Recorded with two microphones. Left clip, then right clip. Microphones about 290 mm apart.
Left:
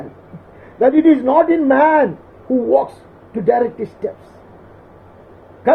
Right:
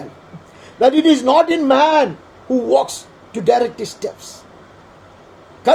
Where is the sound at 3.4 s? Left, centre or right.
Right.